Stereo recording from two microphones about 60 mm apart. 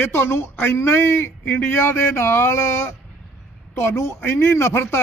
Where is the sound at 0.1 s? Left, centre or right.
Left.